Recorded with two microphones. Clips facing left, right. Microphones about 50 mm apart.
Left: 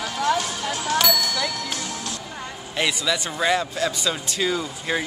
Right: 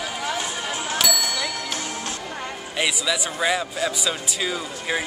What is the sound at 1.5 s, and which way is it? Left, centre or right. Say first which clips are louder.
Music: right 1 dB; right.